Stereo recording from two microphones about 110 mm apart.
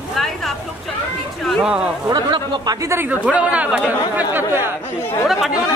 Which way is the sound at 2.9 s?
20° right (ahead or behind).